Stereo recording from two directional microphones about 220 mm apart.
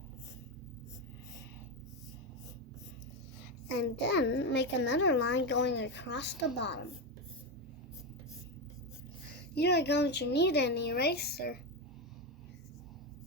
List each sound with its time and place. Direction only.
3.8 s a child's voice: 55° left (ahead or behind)
9.3 s a child's voice: 50° left (ahead or behind)